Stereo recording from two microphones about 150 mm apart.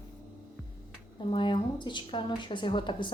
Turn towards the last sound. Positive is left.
turn(degrees=30)  # may be behind; listen again after turning